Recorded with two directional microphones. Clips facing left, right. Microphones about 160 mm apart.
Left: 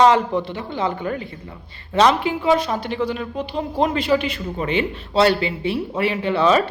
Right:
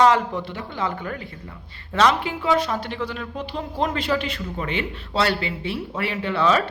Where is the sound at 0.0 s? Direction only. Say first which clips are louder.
Left 3 dB; 25° left (ahead or behind).